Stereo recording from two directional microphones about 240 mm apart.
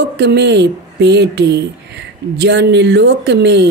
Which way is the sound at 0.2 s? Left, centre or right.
Right.